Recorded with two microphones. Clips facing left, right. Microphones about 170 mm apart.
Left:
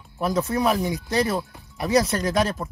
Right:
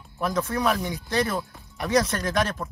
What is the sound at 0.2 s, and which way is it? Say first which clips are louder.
Speech: left 3 dB; 15° left (ahead or behind).